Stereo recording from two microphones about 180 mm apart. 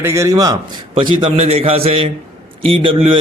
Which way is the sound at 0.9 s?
30° right (ahead or behind).